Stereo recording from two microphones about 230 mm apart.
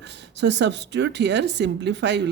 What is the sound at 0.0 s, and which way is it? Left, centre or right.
A woman's voice, right.